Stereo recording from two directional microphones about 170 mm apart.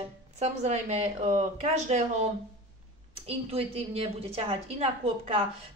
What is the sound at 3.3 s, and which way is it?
A woman's voice, 35° right (ahead or behind).